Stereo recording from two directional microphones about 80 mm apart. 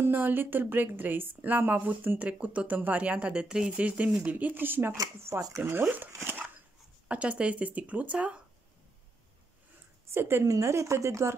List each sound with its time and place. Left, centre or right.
0.0 s a woman's voice: right
5.6 s a woman's voice: right
6.1 s dog: right
7.1 s speech: centre
10.0 s a woman's voice: right